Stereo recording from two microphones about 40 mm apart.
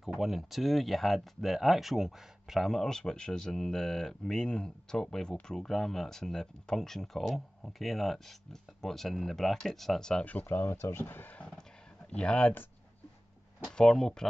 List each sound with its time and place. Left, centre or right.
0.2 s speech: centre
2.6 s speech: centre
10.2 s speech: left
10.6 s speech: left
12.1 s speech: left
13.7 s speech: centre